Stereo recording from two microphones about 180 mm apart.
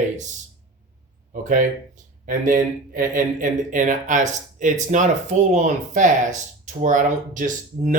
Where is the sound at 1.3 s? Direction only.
45° right (ahead or behind).